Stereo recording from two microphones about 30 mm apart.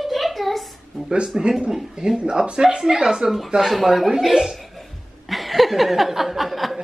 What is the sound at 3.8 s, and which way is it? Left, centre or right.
Speech, centre.